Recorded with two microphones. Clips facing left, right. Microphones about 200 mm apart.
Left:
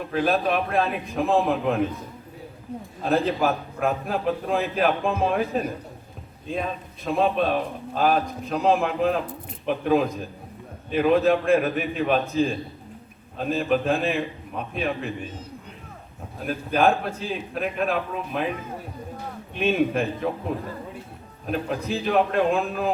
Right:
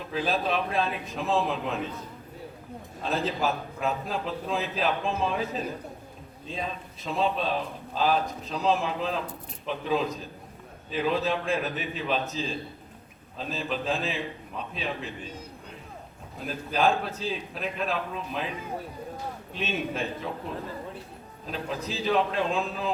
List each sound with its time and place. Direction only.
0.1 s a man's voice: 60° left (ahead or behind)
3.0 s a man's voice: 55° left (ahead or behind)
16.5 s a man's voice: 55° left (ahead or behind)
19.5 s a man's voice: 60° left (ahead or behind)
21.4 s a man's voice: 55° left (ahead or behind)